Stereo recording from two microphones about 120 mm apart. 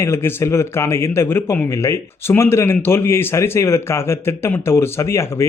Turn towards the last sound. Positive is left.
turn(degrees=25)  # may be behind; listen again after turning